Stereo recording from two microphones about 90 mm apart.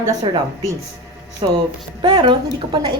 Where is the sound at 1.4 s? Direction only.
60° right (ahead or behind).